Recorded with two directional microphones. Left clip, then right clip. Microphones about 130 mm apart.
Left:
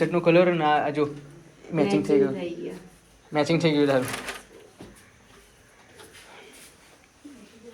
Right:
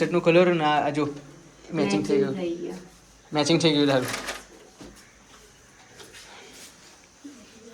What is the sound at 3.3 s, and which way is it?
Speech, 15° right (ahead or behind).